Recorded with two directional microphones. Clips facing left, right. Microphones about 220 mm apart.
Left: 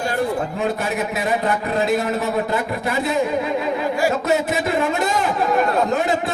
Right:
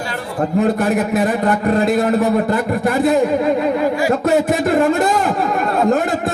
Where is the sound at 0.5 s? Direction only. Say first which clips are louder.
Right 7 dB; 50° right (ahead or behind).